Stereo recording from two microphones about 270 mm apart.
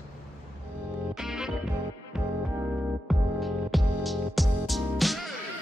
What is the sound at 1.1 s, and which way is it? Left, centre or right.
Music, centre.